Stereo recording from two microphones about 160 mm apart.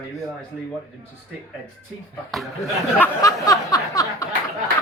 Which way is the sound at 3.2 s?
20° left (ahead or behind).